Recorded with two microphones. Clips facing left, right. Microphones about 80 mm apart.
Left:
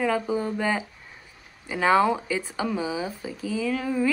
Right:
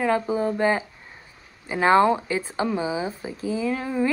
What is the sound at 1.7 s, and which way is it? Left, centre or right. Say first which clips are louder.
Speech: right 3 dB; right.